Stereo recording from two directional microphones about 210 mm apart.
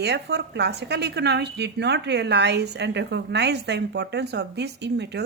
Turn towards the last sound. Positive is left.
turn(degrees=-55)  # may be behind; listen again after turning